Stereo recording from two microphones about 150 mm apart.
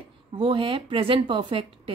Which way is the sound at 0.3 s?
35° right (ahead or behind).